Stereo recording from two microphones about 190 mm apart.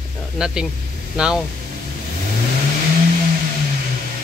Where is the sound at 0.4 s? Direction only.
5° right (ahead or behind).